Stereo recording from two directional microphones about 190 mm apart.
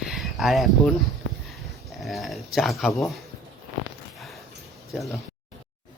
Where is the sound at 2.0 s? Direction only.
Centre (ahead or behind).